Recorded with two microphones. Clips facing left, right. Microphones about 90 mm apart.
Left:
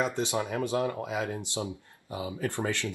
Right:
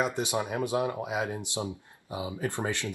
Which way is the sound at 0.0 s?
15° right (ahead or behind).